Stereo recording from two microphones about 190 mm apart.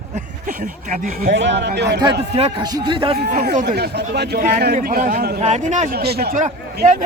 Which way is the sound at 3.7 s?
60° right (ahead or behind).